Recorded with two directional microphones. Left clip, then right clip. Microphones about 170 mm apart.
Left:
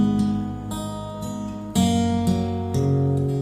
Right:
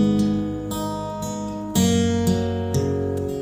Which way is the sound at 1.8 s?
45° right (ahead or behind).